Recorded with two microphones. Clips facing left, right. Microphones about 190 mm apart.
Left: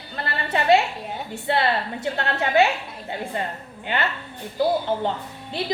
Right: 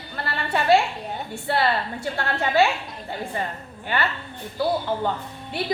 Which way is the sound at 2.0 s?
20° left (ahead or behind).